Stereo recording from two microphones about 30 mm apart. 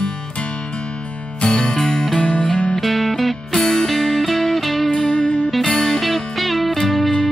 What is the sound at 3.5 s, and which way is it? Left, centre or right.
Music, centre.